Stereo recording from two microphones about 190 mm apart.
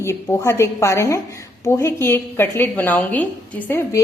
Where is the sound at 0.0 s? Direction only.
15° left (ahead or behind).